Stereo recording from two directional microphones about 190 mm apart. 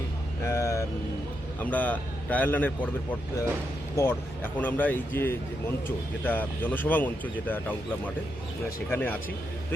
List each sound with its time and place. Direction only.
0.4 s vehicle: 15° left (ahead or behind)
1.6 s speech: 10° left (ahead or behind)